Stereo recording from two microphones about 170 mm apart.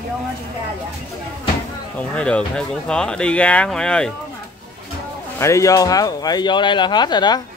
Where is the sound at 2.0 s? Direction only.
5° left (ahead or behind).